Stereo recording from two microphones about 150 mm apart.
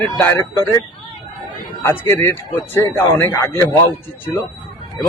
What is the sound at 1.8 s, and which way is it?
Speech, 15° left (ahead or behind).